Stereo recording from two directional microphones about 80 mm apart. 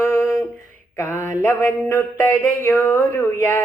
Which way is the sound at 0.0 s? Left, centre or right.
Left.